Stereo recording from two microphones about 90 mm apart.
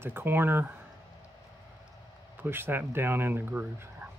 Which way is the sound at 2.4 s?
25° right (ahead or behind).